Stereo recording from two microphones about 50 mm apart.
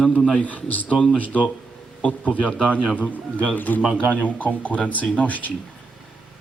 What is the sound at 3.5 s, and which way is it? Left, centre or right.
A man's voice, left.